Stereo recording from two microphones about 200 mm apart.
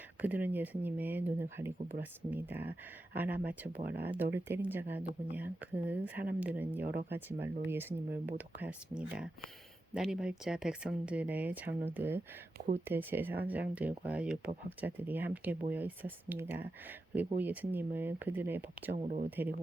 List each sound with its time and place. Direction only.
0.2 s speech: 10° right (ahead or behind)
12.5 s speech: 40° right (ahead or behind)
12.8 s speech: 10° right (ahead or behind)